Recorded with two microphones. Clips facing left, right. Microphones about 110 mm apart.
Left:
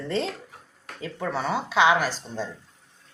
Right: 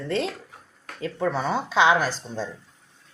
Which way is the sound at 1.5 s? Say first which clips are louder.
Even; 30° right (ahead or behind).